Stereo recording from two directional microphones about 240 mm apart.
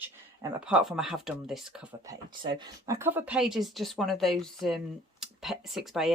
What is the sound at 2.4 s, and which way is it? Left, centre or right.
Speech, centre.